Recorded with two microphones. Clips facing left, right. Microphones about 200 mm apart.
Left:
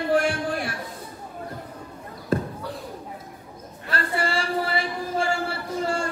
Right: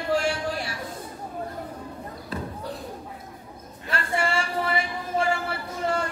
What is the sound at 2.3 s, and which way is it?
Basketball bounce, 45° left (ahead or behind).